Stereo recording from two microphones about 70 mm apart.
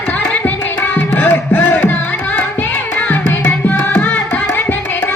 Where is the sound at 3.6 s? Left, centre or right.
Left.